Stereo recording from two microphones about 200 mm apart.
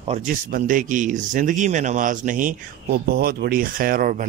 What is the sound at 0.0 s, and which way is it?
Speech, 35° right (ahead or behind).